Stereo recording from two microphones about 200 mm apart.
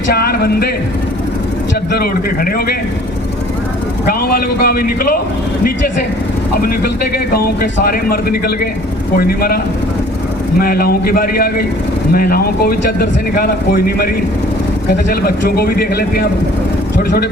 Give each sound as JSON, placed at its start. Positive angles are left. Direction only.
{"t": 0.1, "sound": "speech", "side_deg": 50}
{"t": 1.9, "sound": "speech", "side_deg": 50}
{"t": 4.0, "sound": "speech", "side_deg": 50}
{"t": 6.5, "sound": "speech", "side_deg": 50}
{"t": 10.6, "sound": "speech", "side_deg": 50}
{"t": 15.1, "sound": "speech", "side_deg": 50}